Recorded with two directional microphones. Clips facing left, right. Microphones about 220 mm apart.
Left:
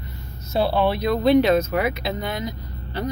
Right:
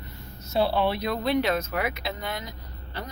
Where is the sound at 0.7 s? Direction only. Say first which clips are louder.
Left 5 dB; 40° left (ahead or behind); by 2.5 s 20° left (ahead or behind).